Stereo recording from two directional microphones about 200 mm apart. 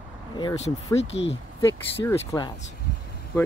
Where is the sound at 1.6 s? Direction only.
15° left (ahead or behind).